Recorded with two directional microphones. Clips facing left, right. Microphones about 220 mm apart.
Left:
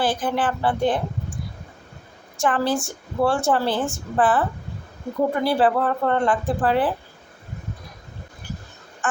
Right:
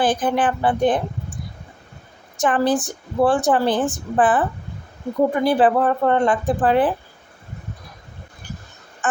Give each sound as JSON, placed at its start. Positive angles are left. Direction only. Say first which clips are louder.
{"t": 0.0, "sound": "a woman's voice", "louder": "right 3 dB", "side_deg": -20}
{"t": 2.4, "sound": "a woman's voice", "louder": "right 3 dB", "side_deg": -20}